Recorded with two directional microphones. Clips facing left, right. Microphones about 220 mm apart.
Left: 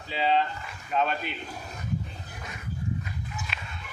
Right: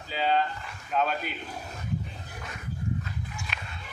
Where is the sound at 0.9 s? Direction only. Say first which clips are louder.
Even; centre (ahead or behind).